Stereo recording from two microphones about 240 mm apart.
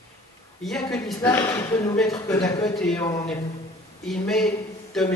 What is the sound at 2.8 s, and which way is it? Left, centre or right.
Speech, centre.